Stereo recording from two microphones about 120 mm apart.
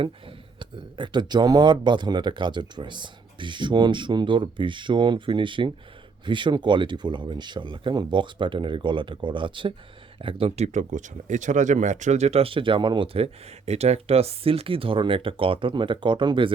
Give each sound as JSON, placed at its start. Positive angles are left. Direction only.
{"t": 0.0, "sound": "speech", "side_deg": -45}